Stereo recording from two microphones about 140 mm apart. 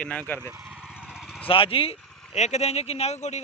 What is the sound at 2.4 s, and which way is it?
Speech, 50° left (ahead or behind).